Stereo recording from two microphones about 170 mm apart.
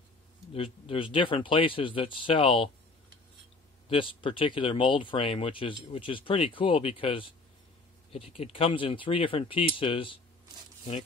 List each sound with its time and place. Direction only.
0.8 s speech: 30° left (ahead or behind)
3.9 s speech: 30° left (ahead or behind)